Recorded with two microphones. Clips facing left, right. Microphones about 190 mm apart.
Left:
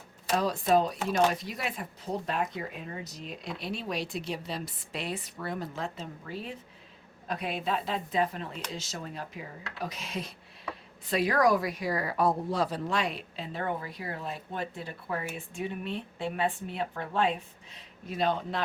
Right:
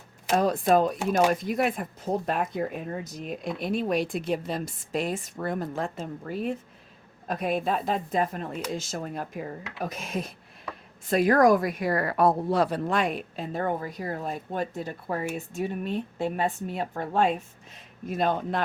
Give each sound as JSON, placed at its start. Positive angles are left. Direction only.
{"t": 0.3, "sound": "a woman's voice", "side_deg": -50}
{"t": 0.9, "sound": "speech", "side_deg": -10}
{"t": 1.3, "sound": "a woman's voice", "side_deg": -50}